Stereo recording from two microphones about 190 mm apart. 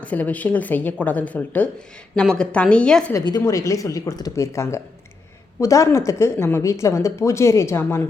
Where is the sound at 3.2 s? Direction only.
20° left (ahead or behind).